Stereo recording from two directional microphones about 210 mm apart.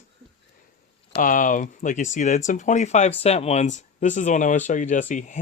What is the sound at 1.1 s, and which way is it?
Speech, 40° left (ahead or behind).